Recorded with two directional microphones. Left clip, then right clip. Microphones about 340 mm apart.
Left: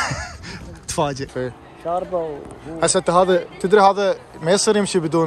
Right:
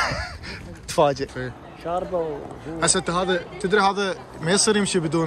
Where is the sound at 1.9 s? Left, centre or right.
Centre.